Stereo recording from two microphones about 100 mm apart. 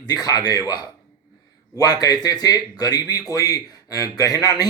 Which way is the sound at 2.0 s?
40° left (ahead or behind).